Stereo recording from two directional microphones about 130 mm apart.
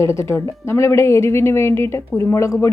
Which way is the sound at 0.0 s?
20° left (ahead or behind).